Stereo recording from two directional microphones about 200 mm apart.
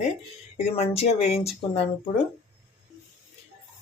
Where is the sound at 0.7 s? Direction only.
30° left (ahead or behind).